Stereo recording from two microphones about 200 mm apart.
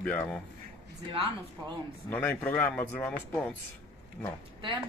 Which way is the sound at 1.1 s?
30° right (ahead or behind).